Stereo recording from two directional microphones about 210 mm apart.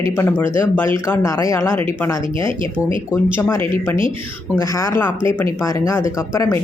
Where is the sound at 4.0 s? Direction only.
25° right (ahead or behind).